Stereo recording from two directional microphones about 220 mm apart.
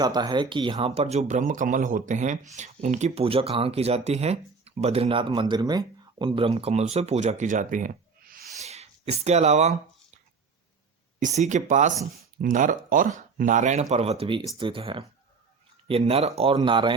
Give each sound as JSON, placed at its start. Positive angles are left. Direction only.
{"t": 0.0, "sound": "speech", "side_deg": -20}
{"t": 11.2, "sound": "speech", "side_deg": -35}